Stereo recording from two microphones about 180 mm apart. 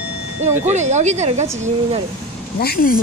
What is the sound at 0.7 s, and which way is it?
Speech, 40° right (ahead or behind).